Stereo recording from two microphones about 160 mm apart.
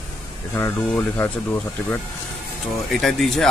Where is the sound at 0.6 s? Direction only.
15° left (ahead or behind).